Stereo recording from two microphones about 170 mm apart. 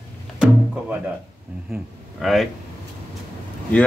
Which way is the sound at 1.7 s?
Centre (ahead or behind).